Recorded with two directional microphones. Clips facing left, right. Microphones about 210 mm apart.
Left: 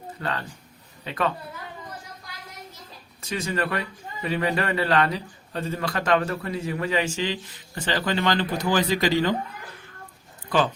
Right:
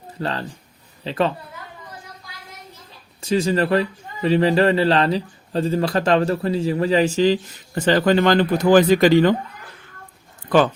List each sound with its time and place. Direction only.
0.2 s a woman's voice: 30° right (ahead or behind)
3.2 s speech: 30° right (ahead or behind); by 9.3 s 55° right (ahead or behind)